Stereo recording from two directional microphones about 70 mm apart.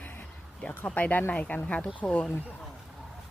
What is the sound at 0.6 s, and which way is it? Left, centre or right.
Speech, centre.